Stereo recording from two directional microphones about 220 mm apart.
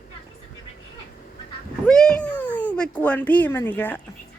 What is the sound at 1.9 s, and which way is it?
Speech, 5° left (ahead or behind).